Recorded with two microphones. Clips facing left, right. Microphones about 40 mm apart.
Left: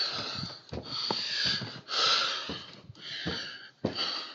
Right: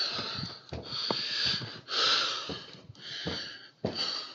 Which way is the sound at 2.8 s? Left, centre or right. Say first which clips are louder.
Left 1 dB; centre.